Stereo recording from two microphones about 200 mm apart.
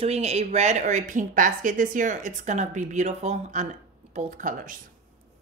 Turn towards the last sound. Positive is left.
turn(degrees=-40)  # may be behind; listen again after turning